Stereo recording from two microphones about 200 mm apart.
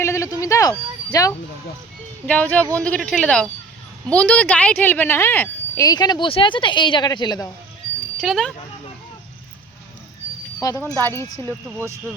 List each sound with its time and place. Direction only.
0.0 s a sound: 15° left (ahead or behind)
2.2 s speech: 5° left (ahead or behind)
8.2 s speech: centre (ahead or behind)
10.6 s speech: 15° left (ahead or behind)